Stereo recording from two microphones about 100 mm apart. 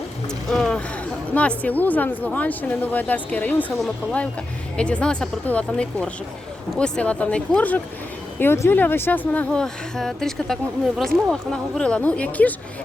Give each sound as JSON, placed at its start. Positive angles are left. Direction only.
{"t": 0.5, "sound": "a sound", "side_deg": 5}
{"t": 1.3, "sound": "speech", "side_deg": 15}
{"t": 4.8, "sound": "speech", "side_deg": 10}
{"t": 8.4, "sound": "speech", "side_deg": 25}